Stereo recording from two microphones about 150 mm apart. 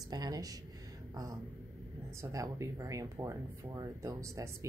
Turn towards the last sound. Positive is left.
turn(degrees=-20)  # may be behind; listen again after turning